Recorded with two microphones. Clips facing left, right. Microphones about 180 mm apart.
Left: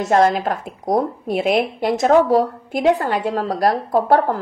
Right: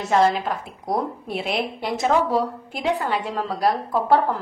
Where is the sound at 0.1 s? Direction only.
45° left (ahead or behind).